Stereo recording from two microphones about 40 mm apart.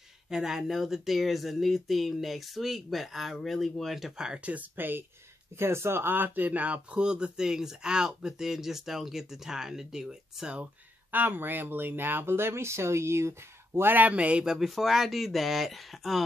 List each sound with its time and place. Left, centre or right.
0.3 s speech: centre
4.4 s speech: right
4.7 s speech: right
5.6 s speech: right
6.6 s speech: right
7.0 s speech: right
11.1 s speech: right
14.1 s speech: right
14.4 s speech: centre